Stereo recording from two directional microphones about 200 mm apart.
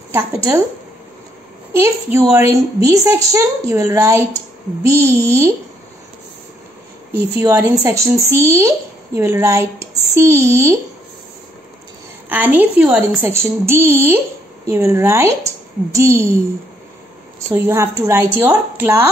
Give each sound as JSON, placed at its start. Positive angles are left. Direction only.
{"t": 0.1, "sound": "speech", "side_deg": -15}
{"t": 1.7, "sound": "speech", "side_deg": -15}
{"t": 7.3, "sound": "speech", "side_deg": -15}
{"t": 12.3, "sound": "speech", "side_deg": -10}
{"t": 17.5, "sound": "speech", "side_deg": -15}